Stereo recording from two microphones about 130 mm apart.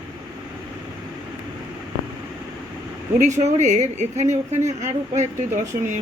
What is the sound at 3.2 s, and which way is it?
A woman's voice, 65° right (ahead or behind).